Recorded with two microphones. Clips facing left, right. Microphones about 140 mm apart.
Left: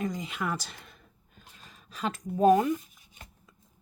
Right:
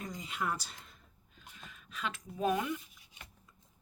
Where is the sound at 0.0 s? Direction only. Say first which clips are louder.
Left 6 dB; 90° left.